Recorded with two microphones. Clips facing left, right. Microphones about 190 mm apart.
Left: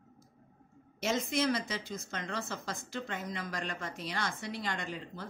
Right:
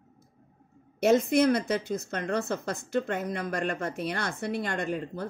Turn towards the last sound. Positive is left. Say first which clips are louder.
# right 9 dB
turn(degrees=-55)  # may be behind; listen again after turning